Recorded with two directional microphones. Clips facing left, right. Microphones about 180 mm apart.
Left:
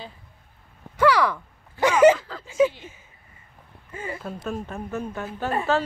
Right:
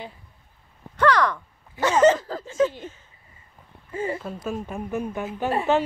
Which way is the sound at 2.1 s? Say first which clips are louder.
Right 7 dB; 40° right (ahead or behind).